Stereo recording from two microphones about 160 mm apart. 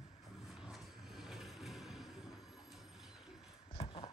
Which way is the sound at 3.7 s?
35° left (ahead or behind).